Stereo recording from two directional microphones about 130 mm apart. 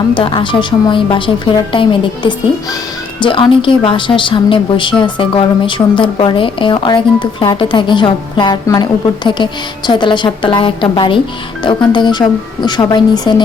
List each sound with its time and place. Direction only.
0.1 s a woman's voice: 40° left (ahead or behind)